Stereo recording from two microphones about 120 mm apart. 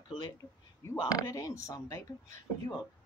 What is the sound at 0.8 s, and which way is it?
Speech, 30° left (ahead or behind).